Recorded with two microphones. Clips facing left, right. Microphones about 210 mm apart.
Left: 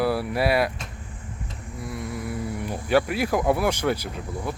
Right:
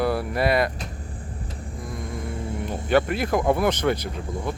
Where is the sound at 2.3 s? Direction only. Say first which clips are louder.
Even; 25° right (ahead or behind).